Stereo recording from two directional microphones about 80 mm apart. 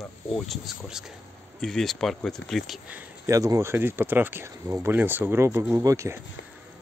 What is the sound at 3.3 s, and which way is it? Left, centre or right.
Speech, right.